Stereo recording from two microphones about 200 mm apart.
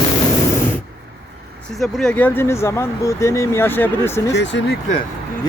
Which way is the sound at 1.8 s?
Centre (ahead or behind).